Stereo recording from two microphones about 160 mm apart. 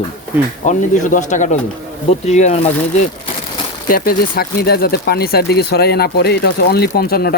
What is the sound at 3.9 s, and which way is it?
Speech, 70° left (ahead or behind).